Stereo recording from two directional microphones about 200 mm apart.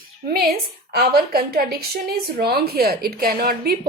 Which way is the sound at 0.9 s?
50° right (ahead or behind).